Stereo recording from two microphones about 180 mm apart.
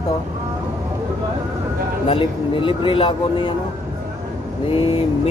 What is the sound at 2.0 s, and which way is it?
Speech, 30° left (ahead or behind).